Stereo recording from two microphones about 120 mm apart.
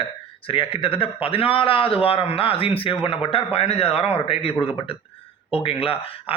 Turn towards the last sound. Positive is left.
turn(degrees=50)  # may be behind; listen again after turning